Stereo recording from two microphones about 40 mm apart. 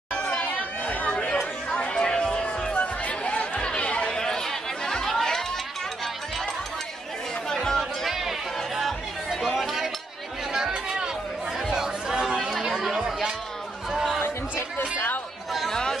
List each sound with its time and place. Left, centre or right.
0.1 s chatter: left
0.4 s chatter: left
1.8 s chatter: left
4.2 s chatter: centre
7.4 s chatter: centre
8.1 s chatter: centre
11.7 s chatter: centre
14.8 s chatter: left
15.7 s chatter: centre